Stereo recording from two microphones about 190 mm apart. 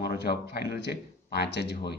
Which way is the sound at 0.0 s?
55° left (ahead or behind).